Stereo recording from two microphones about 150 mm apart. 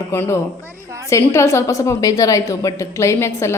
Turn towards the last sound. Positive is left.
turn(degrees=15)  # may be behind; listen again after turning